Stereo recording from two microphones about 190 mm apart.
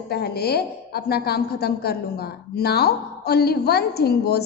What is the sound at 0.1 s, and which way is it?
A woman's voice, 55° left (ahead or behind).